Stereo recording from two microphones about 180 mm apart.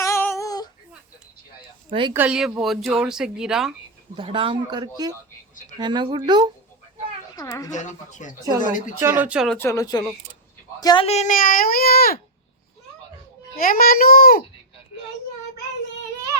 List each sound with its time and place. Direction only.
0.0 s female singing: 15° left (ahead or behind)
1.9 s speech: 25° right (ahead or behind)
2.1 s speech: 5° right (ahead or behind)
4.2 s a man's voice: 30° right (ahead or behind)
7.3 s speech: 20° left (ahead or behind)
7.7 s speech: 40° left (ahead or behind)
8.4 s speech: 15° right (ahead or behind)
9.6 s a man's voice: 15° left (ahead or behind)
11.0 s speech: 40° left (ahead or behind); by 12.2 s 55° left (ahead or behind)
13.6 s speech: 50° left (ahead or behind)